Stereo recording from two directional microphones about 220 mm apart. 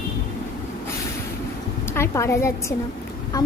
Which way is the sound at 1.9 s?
10° left (ahead or behind).